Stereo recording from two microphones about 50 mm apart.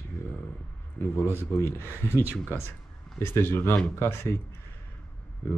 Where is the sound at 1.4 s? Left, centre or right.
Left.